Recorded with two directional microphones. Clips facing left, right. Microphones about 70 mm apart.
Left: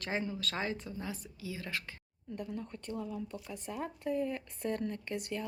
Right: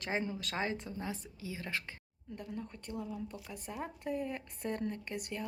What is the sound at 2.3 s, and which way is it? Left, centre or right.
Speech, centre.